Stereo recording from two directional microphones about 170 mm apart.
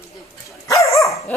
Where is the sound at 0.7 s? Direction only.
20° left (ahead or behind).